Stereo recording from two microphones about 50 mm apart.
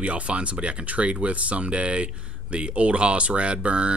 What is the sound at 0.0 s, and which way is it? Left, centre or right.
Speech, right.